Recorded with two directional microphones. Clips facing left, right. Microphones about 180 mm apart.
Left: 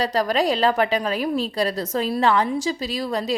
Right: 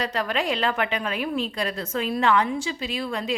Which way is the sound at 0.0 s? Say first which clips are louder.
Left 5 dB; 35° left (ahead or behind).